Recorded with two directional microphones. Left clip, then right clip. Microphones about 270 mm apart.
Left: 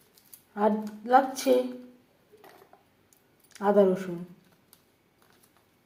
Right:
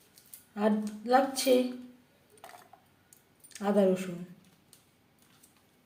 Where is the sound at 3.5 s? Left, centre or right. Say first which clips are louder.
Left 5 dB; centre.